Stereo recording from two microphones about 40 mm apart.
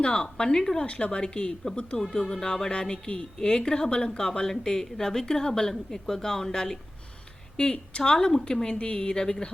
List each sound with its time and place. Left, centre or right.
0.0 s a woman's voice: left
0.9 s a woman's voice: left